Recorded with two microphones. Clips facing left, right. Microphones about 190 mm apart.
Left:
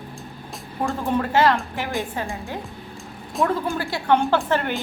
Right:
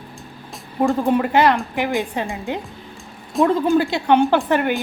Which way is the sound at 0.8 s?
15° right (ahead or behind).